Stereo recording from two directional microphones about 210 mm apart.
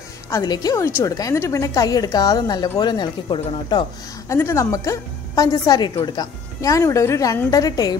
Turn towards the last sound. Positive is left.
turn(degrees=15)  # may be behind; listen again after turning